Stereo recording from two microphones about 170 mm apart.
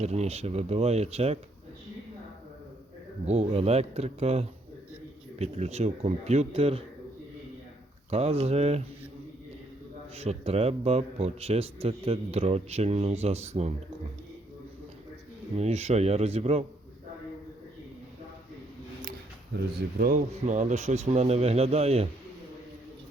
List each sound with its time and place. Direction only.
0.0 s a man's voice: 40° right (ahead or behind)
3.2 s a man's voice: 40° right (ahead or behind)
8.1 s a man's voice: 40° right (ahead or behind)
10.2 s a man's voice: 40° right (ahead or behind)
15.5 s a man's voice: 40° right (ahead or behind)
19.5 s speech: 60° right (ahead or behind)
20.4 s a man's voice: 45° right (ahead or behind)